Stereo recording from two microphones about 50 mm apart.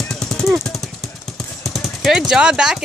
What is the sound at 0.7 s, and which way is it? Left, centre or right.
Jackhammer, centre.